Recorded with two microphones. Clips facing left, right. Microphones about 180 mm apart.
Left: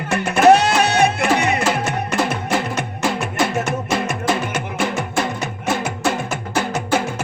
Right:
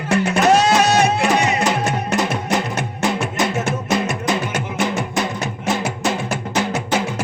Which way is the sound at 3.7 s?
55° left (ahead or behind).